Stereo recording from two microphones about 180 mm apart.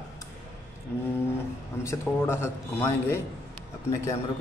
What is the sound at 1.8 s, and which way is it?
A man's voice, 15° left (ahead or behind).